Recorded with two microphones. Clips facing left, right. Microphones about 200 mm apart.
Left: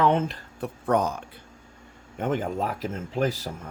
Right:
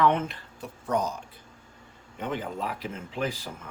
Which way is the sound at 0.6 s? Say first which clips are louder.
Left 5 dB; 60° left (ahead or behind).